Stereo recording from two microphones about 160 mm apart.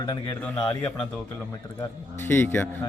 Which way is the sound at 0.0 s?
30° left (ahead or behind).